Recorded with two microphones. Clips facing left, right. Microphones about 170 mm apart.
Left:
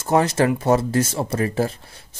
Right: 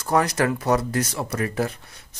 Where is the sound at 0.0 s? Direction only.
25° left (ahead or behind).